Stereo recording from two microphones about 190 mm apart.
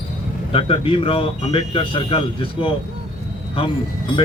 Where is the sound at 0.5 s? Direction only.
30° left (ahead or behind).